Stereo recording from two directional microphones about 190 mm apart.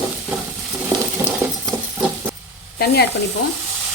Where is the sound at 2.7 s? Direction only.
60° left (ahead or behind).